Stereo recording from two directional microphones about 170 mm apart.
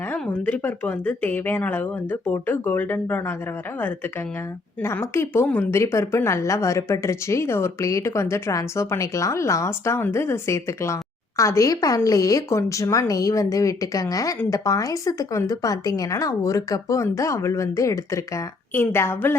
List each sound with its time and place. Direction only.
0.1 s speech: 10° left (ahead or behind)
4.8 s a woman's voice: 15° left (ahead or behind)